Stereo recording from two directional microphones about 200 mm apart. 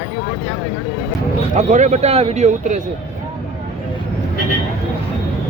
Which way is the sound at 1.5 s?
35° right (ahead or behind).